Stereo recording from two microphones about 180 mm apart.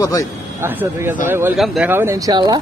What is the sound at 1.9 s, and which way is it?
Speech, 15° right (ahead or behind).